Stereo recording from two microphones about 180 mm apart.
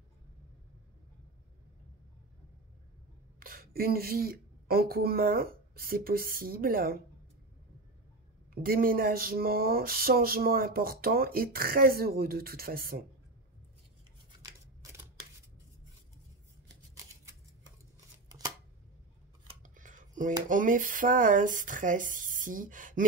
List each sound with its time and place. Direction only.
3.3 s speech: 55° right (ahead or behind)
8.6 s a sound: 55° right (ahead or behind)
14.4 s scissors: 20° right (ahead or behind)
18.3 s chopping: 20° right (ahead or behind)
19.6 s cutlery: 45° right (ahead or behind)
20.4 s speech: 45° right (ahead or behind)